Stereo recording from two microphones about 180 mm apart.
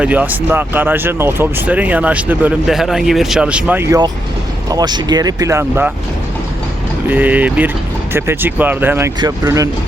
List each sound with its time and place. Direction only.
0.0 s speech: 10° right (ahead or behind)
4.7 s speech: 25° right (ahead or behind)
7.1 s speech: 10° right (ahead or behind)